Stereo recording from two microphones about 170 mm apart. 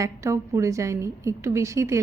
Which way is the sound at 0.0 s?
20° right (ahead or behind).